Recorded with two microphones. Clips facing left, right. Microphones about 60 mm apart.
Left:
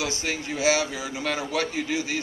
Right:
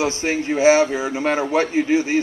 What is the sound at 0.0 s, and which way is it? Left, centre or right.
A man's voice, right.